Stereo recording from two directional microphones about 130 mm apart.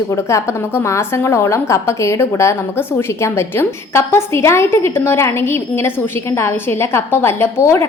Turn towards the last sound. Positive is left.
turn(degrees=20)  # may be behind; listen again after turning